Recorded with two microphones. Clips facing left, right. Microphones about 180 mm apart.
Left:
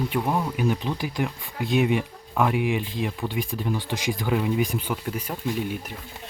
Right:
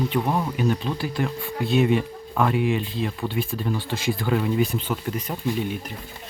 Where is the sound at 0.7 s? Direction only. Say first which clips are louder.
Right 1 dB; 15° left (ahead or behind).